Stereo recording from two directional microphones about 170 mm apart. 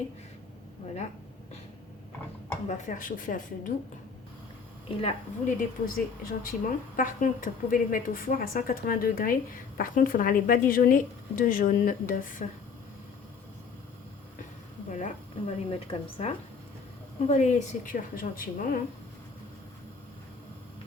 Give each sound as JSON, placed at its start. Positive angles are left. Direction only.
{"t": 2.6, "sound": "a woman's voice", "side_deg": 50}
{"t": 5.5, "sound": "a woman's voice", "side_deg": 55}
{"t": 14.8, "sound": "a woman's voice", "side_deg": 45}